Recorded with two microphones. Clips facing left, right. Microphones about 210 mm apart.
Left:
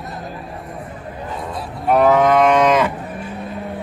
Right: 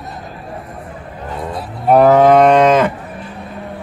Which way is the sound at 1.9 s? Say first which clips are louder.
Right 5 dB; 35° right (ahead or behind).